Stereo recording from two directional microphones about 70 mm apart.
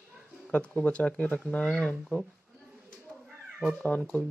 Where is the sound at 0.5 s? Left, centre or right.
Centre.